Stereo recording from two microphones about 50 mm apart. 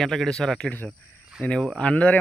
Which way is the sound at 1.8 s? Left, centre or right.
Left.